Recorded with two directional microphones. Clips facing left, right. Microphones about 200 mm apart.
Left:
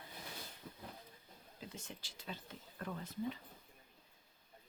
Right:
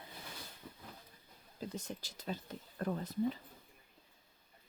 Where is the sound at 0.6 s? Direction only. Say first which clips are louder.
Even; centre (ahead or behind).